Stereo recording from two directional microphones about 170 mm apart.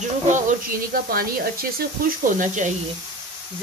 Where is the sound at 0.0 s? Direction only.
45° right (ahead or behind).